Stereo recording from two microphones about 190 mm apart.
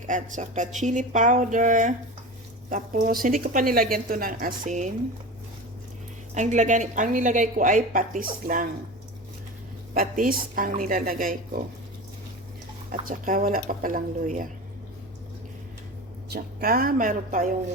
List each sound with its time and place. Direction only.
0.0 s a woman's voice: 40° right (ahead or behind)
6.3 s a woman's voice: 40° right (ahead or behind)
9.9 s a woman's voice: 50° right (ahead or behind)
13.1 s a woman's voice: 45° right (ahead or behind)
16.3 s a woman's voice: 50° right (ahead or behind)